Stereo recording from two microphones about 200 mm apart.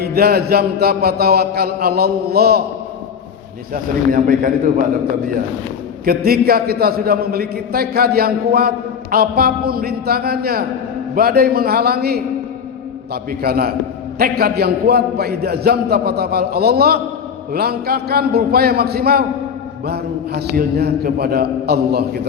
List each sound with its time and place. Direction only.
0.0 s a man's voice: 50° right (ahead or behind)
4.1 s a man's voice: 45° right (ahead or behind)
6.1 s a man's voice: 50° right (ahead or behind)
13.4 s a man's voice: 50° right (ahead or behind)